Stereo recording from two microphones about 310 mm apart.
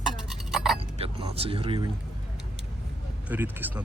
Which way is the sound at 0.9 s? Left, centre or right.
Centre.